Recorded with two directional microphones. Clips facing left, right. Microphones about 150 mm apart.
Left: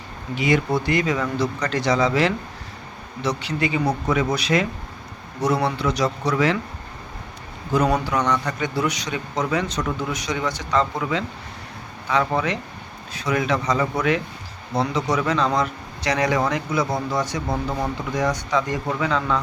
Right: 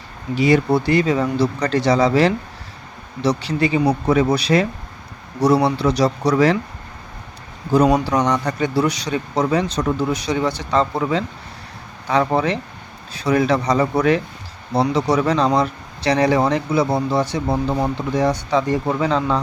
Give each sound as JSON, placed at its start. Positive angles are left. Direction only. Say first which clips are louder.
{"t": 0.3, "sound": "speech", "louder": "right 5 dB", "side_deg": -35}
{"t": 5.6, "sound": "speech", "louder": "right 5 dB", "side_deg": -35}
{"t": 8.0, "sound": "speech", "louder": "right 4 dB", "side_deg": -35}